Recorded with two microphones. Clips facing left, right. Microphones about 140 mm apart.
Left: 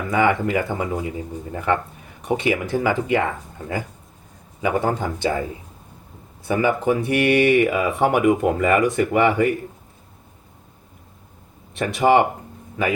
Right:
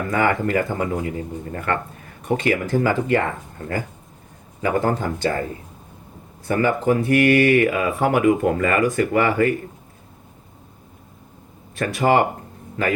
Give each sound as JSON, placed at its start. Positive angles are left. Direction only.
{"t": 0.1, "sound": "speech", "side_deg": 15}
{"t": 2.2, "sound": "speech", "side_deg": 15}
{"t": 4.6, "sound": "speech", "side_deg": 15}
{"t": 6.5, "sound": "speech", "side_deg": 15}
{"t": 11.7, "sound": "speech", "side_deg": 20}